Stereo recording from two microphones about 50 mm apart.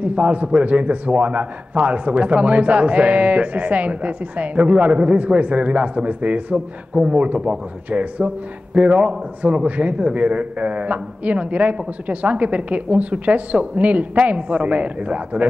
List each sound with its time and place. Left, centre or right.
0.0 s a man's voice: right